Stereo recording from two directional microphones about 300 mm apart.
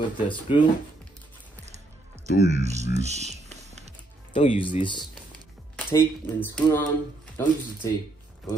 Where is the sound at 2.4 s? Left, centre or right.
Right.